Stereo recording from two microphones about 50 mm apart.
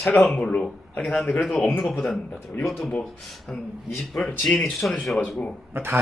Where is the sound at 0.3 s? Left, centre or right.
Left.